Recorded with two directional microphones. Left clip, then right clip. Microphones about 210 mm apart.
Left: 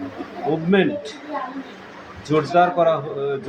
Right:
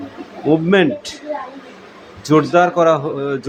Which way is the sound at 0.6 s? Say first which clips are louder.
Right 5 dB; 40° right (ahead or behind).